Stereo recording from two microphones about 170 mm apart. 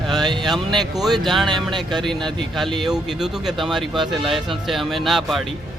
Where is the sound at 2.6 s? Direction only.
Centre (ahead or behind).